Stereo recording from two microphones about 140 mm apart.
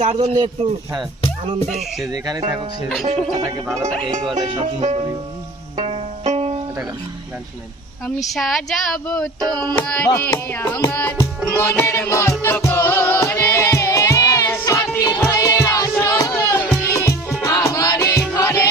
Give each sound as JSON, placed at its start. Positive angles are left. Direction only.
{"t": 0.0, "sound": "banjo", "side_deg": -50}
{"t": 0.3, "sound": "a man's voice", "side_deg": -40}
{"t": 2.1, "sound": "music", "side_deg": -25}
{"t": 4.6, "sound": "banjo", "side_deg": -50}
{"t": 5.7, "sound": "music", "side_deg": -50}
{"t": 8.0, "sound": "speech", "side_deg": 0}
{"t": 9.4, "sound": "music", "side_deg": -30}
{"t": 9.7, "sound": "music", "side_deg": 10}
{"t": 16.5, "sound": "music", "side_deg": 10}